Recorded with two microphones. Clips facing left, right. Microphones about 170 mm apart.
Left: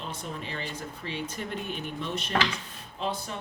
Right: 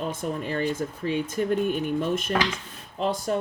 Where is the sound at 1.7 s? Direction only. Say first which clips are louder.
Right 9 dB; 45° right (ahead or behind).